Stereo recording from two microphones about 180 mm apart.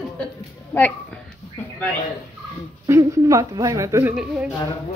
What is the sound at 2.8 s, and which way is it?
A woman's voice, 15° right (ahead or behind).